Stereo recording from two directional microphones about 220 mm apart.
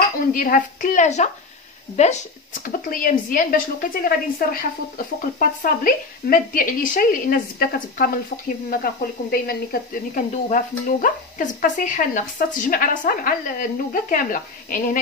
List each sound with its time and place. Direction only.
0.3 s speech: 40° left (ahead or behind)